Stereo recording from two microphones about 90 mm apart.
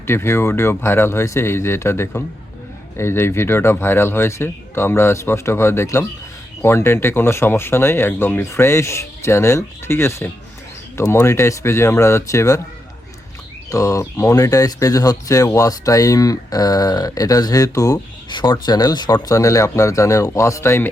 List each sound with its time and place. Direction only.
0.1 s speech: 30° left (ahead or behind)
13.7 s speech: 35° left (ahead or behind)
18.3 s speech: 60° left (ahead or behind)
18.6 s speech: 45° left (ahead or behind)
19.3 s speech: 35° left (ahead or behind)